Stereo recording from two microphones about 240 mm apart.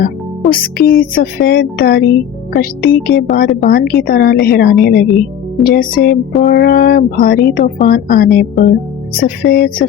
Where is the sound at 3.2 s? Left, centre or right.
Left.